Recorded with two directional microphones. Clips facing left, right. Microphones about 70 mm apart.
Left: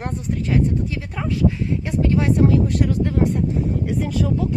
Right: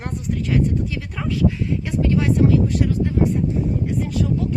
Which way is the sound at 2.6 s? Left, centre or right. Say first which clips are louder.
Even; left.